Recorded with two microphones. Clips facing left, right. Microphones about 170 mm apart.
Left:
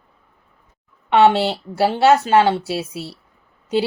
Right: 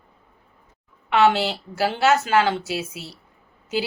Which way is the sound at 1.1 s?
30° left (ahead or behind).